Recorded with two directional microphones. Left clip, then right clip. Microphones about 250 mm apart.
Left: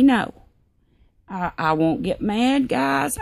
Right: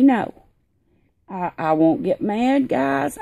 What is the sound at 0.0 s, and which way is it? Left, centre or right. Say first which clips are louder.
A woman's voice: right 1 dB; left.